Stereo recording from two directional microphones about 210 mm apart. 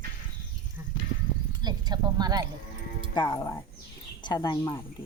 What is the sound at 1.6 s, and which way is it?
Speech, 20° right (ahead or behind).